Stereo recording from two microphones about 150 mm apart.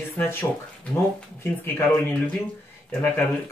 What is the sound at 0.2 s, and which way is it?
Speech, 15° left (ahead or behind).